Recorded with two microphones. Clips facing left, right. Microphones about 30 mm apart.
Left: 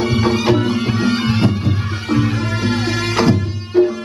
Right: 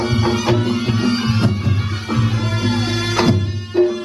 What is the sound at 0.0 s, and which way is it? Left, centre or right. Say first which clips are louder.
Music: left 2 dB; centre.